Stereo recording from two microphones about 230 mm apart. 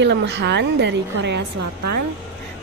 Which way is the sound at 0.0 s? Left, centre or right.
Right.